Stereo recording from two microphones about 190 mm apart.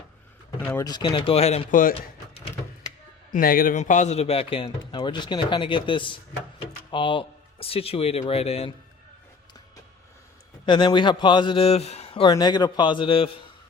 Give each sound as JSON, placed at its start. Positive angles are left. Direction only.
{"t": 0.6, "sound": "speech", "side_deg": 10}
{"t": 0.9, "sound": "speech", "side_deg": 25}
{"t": 3.3, "sound": "speech", "side_deg": 50}
{"t": 10.7, "sound": "speech", "side_deg": 25}